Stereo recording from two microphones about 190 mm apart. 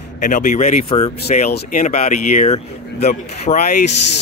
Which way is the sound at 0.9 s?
30° left (ahead or behind).